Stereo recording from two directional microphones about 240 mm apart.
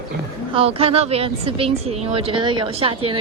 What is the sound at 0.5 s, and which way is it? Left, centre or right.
Speech, right.